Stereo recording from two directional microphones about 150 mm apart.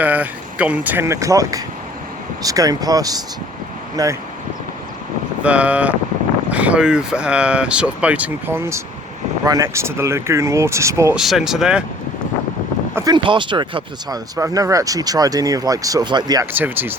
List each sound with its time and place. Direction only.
0.0 s speech: 10° right (ahead or behind)
5.4 s speech: 10° right (ahead or behind)
11.1 s speech: centre (ahead or behind)
12.9 s speech: 20° right (ahead or behind)
13.1 s speech: 35° right (ahead or behind)
16.5 s speech: 15° right (ahead or behind)